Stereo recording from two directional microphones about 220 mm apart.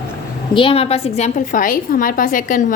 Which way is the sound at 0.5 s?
25° left (ahead or behind).